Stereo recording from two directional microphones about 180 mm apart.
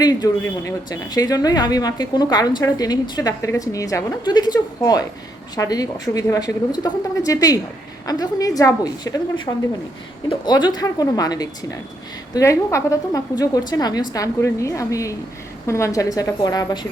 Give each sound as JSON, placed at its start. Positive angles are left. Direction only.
{"t": 0.0, "sound": "a woman's voice", "side_deg": 20}